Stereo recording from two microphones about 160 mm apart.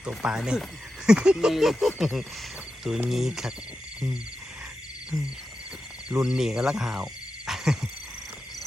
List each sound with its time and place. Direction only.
0.0 s speech: 5° right (ahead or behind)
5.1 s speech: 5° right (ahead or behind)